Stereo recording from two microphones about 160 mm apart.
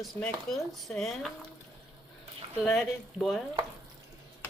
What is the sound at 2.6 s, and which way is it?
Speech, centre (ahead or behind).